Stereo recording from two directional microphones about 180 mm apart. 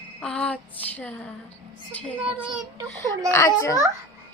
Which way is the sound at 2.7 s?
20° right (ahead or behind).